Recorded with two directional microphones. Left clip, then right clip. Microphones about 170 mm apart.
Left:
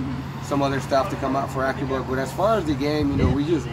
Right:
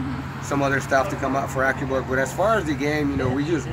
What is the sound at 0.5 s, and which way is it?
Speech, 10° right (ahead or behind).